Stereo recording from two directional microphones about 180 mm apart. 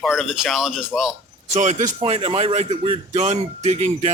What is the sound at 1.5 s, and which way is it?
A man's voice, 35° right (ahead or behind).